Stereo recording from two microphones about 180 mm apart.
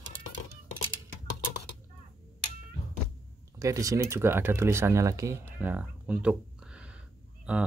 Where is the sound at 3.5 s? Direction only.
20° right (ahead or behind).